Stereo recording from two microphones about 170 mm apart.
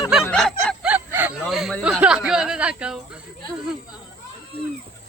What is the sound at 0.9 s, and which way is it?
Speech, 10° right (ahead or behind).